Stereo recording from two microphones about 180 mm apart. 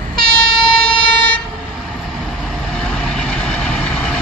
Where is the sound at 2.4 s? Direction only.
5° left (ahead or behind).